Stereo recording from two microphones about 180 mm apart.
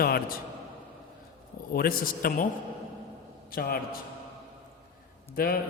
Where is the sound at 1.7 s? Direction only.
55° left (ahead or behind).